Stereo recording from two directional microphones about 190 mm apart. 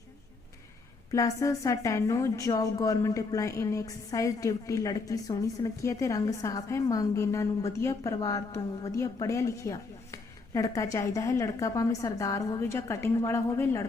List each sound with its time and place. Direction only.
1.1 s a woman's voice: 15° left (ahead or behind)